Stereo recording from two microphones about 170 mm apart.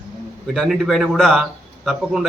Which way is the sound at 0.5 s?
Centre (ahead or behind).